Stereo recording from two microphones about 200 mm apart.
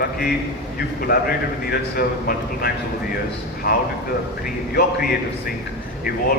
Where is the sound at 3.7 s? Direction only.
50° left (ahead or behind).